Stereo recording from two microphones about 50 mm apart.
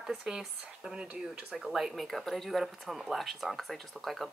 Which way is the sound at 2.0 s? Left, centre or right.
Centre.